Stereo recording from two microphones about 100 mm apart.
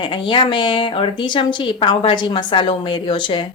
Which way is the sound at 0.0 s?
55° left (ahead or behind).